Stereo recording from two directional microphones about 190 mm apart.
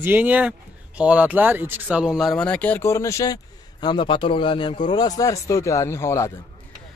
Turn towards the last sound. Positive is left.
turn(degrees=15)  # may be behind; listen again after turning